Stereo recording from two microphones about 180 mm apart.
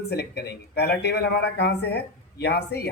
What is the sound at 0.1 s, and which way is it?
Speech, 65° left (ahead or behind).